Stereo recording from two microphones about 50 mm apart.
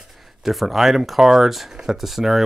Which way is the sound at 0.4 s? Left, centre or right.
Centre.